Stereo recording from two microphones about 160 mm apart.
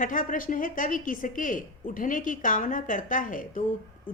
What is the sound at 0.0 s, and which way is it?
A woman's voice, 55° left (ahead or behind).